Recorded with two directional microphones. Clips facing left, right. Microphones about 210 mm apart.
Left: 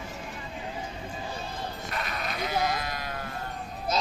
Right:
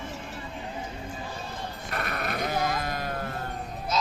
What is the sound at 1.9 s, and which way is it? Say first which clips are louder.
Sheep: right 5 dB; 60° right (ahead or behind).